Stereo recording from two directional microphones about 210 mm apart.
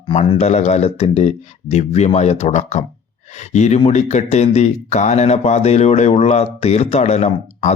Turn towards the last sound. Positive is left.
turn(degrees=30)  # may be behind; listen again after turning